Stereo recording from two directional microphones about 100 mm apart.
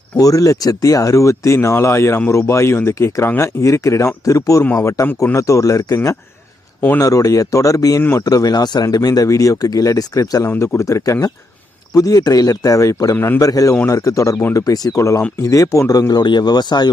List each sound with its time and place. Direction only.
0.2 s speech: 35° left (ahead or behind)
10.5 s speech: 20° left (ahead or behind)
10.8 s speech: 30° left (ahead or behind)
13.1 s speech: 20° left (ahead or behind)
13.4 s speech: 35° left (ahead or behind)